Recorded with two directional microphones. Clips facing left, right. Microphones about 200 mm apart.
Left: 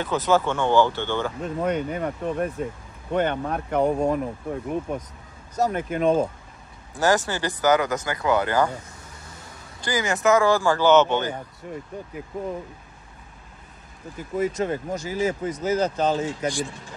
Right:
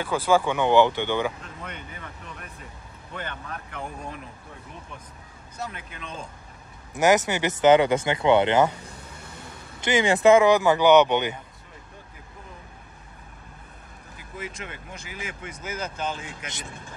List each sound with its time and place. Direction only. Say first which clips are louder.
0.0 s speech: left 1 dB; 10° right (ahead or behind)
1.6 s speech: left 17 dB; 45° left (ahead or behind)
6.9 s speech: right 1 dB; 20° right (ahead or behind)
9.8 s speech: right 4 dB; 25° right (ahead or behind)
14.1 s speech: left 13 dB; 40° left (ahead or behind)